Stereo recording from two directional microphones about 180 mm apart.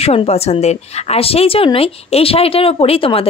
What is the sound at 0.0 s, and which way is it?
A woman's voice, 35° left (ahead or behind).